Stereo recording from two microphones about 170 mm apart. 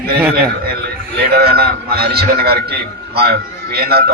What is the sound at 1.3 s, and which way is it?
A man's voice, 70° right (ahead or behind).